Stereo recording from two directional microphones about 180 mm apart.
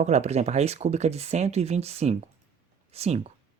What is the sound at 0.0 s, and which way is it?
Speech, 40° right (ahead or behind).